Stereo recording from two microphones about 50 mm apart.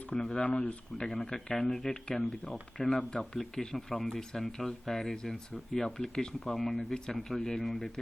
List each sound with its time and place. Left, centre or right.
0.1 s speech: centre
1.0 s speech: centre